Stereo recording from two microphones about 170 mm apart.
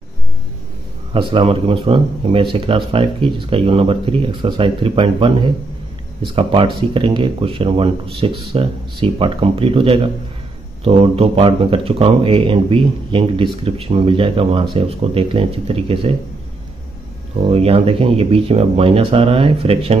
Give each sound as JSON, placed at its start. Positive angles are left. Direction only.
{"t": 1.1, "sound": "speech", "side_deg": -30}
{"t": 17.5, "sound": "speech", "side_deg": -35}